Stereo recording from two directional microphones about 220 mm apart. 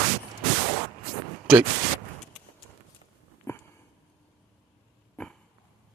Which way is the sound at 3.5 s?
10° left (ahead or behind).